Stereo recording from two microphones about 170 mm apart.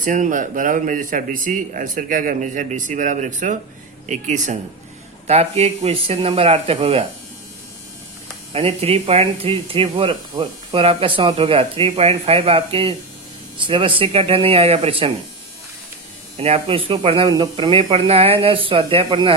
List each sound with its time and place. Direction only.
0.0 s speech: 50° right (ahead or behind); by 7.0 s 35° right (ahead or behind)
8.5 s speech: 35° right (ahead or behind)
16.4 s speech: 35° right (ahead or behind)